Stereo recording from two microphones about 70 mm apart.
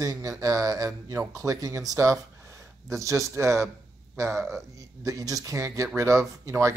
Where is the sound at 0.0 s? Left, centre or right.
Right.